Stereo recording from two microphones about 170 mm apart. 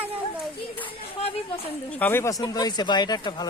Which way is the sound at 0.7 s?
35° left (ahead or behind).